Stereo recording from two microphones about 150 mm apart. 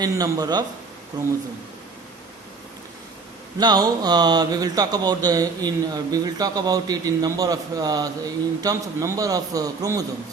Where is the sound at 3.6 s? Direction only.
30° right (ahead or behind).